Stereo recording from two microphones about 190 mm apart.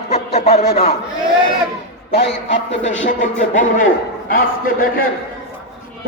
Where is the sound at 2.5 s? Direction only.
75° left (ahead or behind).